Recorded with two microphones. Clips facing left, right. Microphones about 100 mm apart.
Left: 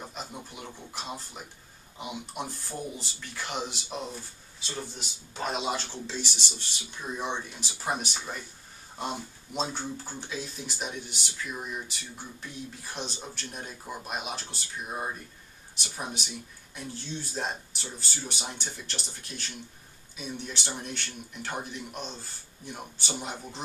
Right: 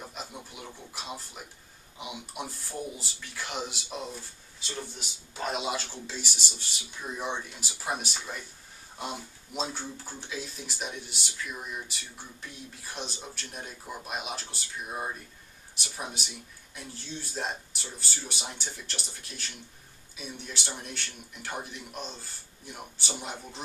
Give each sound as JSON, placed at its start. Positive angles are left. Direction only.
{"t": 0.1, "sound": "a sound", "side_deg": 0}
{"t": 2.0, "sound": "speech", "side_deg": -5}
{"t": 12.8, "sound": "speech", "side_deg": 0}